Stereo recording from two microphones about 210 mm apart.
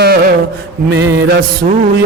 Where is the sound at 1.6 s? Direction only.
40° right (ahead or behind).